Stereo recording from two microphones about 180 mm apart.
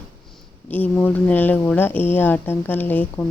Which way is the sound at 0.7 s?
10° left (ahead or behind).